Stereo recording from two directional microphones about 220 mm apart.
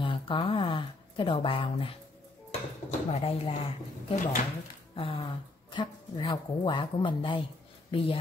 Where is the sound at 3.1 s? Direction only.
30° left (ahead or behind).